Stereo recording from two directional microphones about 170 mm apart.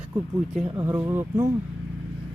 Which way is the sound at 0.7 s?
15° right (ahead or behind).